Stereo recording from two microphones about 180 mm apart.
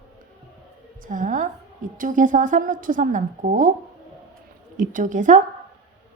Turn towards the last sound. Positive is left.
turn(degrees=-45)  # may be behind; listen again after turning